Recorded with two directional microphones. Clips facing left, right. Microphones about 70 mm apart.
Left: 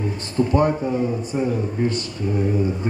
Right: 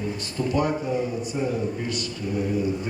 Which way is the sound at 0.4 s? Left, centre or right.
Left.